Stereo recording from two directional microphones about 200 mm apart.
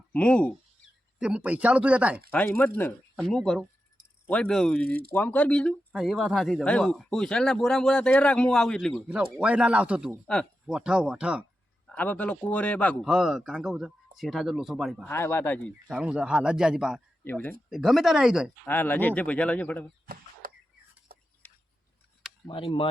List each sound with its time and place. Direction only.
0.1 s speech: 5° left (ahead or behind)
1.2 s speech: 5° right (ahead or behind)
2.3 s speech: 10° left (ahead or behind)
11.9 s speech: 10° left (ahead or behind)
15.0 s speech: 10° left (ahead or behind)
15.9 s speech: 5° right (ahead or behind)
17.2 s speech: 10° left (ahead or behind)
18.6 s speech: 10° left (ahead or behind)
21.1 s a sound: 45° right (ahead or behind)
22.4 s speech: 25° left (ahead or behind)